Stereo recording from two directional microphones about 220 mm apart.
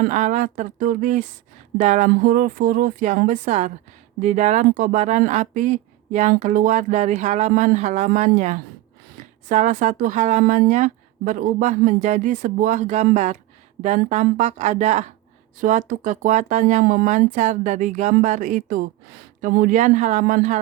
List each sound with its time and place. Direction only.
0.0 s speech: 35° right (ahead or behind)